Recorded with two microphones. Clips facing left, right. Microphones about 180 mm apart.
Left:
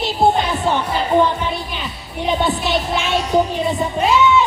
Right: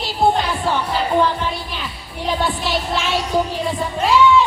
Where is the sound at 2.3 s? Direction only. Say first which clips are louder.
Left 2 dB; 20° left (ahead or behind).